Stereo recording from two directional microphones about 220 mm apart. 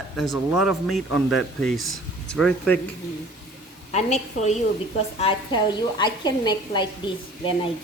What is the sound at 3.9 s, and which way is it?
A woman's voice, 30° left (ahead or behind).